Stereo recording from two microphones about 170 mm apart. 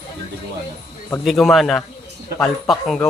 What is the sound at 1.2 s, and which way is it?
Speech, centre (ahead or behind).